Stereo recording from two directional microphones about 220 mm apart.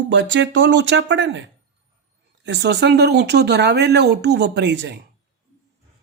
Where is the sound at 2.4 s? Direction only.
50° right (ahead or behind).